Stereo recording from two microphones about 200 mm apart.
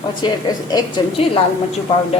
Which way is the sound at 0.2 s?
20° left (ahead or behind).